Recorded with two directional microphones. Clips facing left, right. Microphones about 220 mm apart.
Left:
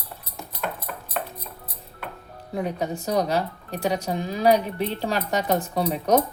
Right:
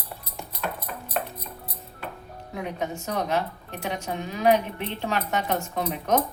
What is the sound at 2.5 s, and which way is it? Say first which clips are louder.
A woman's voice: left 4 dB; 35° left (ahead or behind).